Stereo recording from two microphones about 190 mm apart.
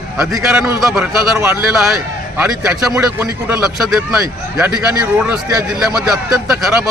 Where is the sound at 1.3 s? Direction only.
15° right (ahead or behind).